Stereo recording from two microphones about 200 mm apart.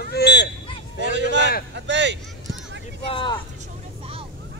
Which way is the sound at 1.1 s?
65° right (ahead or behind).